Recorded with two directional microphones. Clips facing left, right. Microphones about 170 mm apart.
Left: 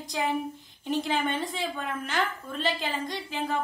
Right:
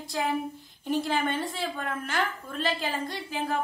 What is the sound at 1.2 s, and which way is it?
Speech, 10° left (ahead or behind).